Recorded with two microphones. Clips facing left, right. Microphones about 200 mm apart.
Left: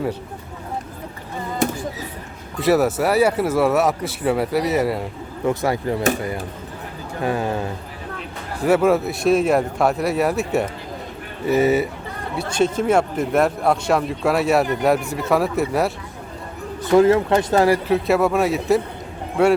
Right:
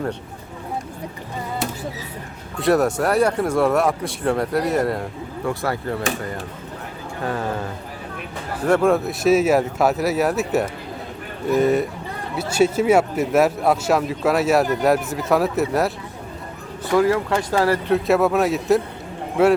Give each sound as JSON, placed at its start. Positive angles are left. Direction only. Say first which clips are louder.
{"t": 2.6, "sound": "speech", "louder": "left 1 dB", "side_deg": 0}
{"t": 5.5, "sound": "speech", "louder": "left 4 dB", "side_deg": 15}
{"t": 8.6, "sound": "speech", "louder": "left 1 dB", "side_deg": 5}
{"t": 12.4, "sound": "speech", "louder": "right 2 dB", "side_deg": -5}
{"t": 16.9, "sound": "speech", "louder": "left 4 dB", "side_deg": 25}
{"t": 17.8, "sound": "speech", "louder": "even", "side_deg": 0}